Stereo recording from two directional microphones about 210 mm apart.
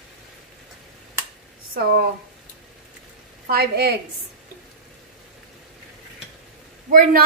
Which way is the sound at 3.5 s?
45° right (ahead or behind).